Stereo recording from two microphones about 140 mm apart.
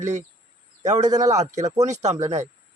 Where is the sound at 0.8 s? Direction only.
55° right (ahead or behind).